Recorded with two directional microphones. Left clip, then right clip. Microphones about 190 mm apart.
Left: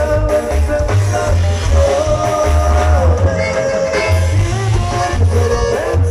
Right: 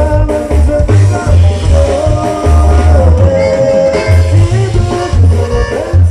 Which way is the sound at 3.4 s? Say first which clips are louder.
Right 9 dB; 45° right (ahead or behind).